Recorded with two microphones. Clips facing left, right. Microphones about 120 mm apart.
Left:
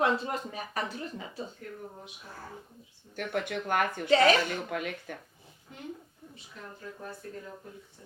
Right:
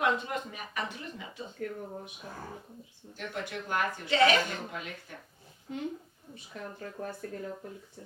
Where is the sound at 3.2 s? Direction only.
60° left (ahead or behind).